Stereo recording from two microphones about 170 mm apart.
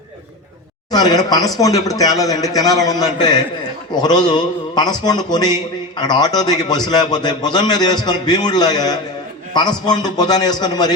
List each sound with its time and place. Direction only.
0.9 s a man's voice: 25° left (ahead or behind)